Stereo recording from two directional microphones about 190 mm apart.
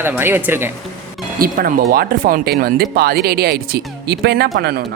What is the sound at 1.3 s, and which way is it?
Speech, 50° right (ahead or behind).